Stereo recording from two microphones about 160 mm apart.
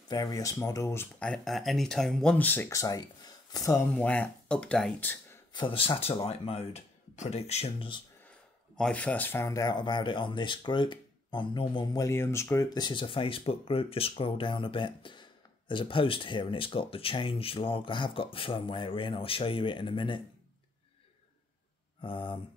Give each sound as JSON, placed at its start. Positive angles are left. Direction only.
{"t": 0.1, "sound": "speech", "side_deg": 25}
{"t": 3.9, "sound": "speech", "side_deg": 10}
{"t": 5.5, "sound": "speech", "side_deg": 30}
{"t": 8.7, "sound": "speech", "side_deg": 5}
{"t": 22.0, "sound": "speech", "side_deg": 35}